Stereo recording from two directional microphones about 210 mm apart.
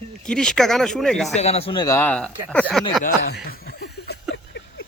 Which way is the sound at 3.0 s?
50° left (ahead or behind).